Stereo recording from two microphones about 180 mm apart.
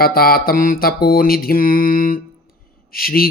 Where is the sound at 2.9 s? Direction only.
55° left (ahead or behind).